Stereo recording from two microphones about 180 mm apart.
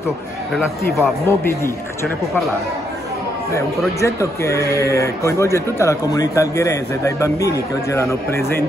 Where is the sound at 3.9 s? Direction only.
15° left (ahead or behind).